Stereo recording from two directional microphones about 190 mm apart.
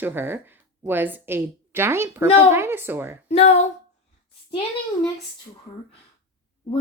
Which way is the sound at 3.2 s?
35° left (ahead or behind).